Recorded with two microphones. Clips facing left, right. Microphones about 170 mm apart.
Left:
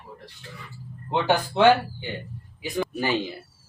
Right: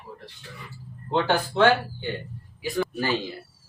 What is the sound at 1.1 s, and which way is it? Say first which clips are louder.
Speech: even; 15° left (ahead or behind).